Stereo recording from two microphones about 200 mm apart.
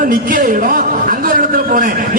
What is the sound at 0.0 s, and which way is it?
A man's voice, 45° right (ahead or behind).